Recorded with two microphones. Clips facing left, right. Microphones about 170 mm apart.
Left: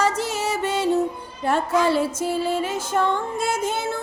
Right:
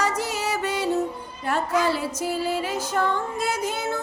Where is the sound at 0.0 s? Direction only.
25° left (ahead or behind).